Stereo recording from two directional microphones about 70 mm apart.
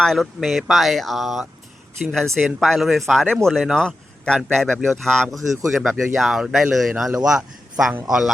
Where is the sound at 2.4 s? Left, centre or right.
Centre.